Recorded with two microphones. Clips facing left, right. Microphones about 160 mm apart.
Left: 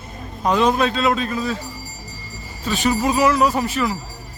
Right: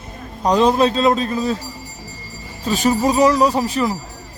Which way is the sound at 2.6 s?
40° right (ahead or behind).